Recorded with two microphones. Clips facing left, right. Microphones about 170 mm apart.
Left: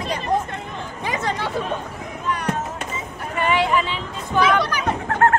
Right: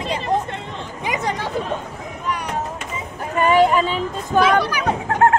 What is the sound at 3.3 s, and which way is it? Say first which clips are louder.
Speech: right 5 dB; 45° right (ahead or behind).